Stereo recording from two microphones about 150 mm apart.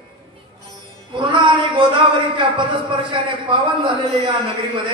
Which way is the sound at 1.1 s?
35° right (ahead or behind).